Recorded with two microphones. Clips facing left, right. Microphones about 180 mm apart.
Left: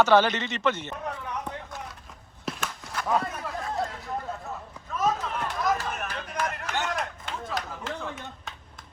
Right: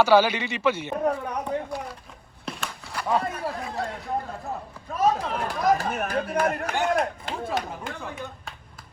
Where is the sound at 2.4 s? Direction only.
Centre (ahead or behind).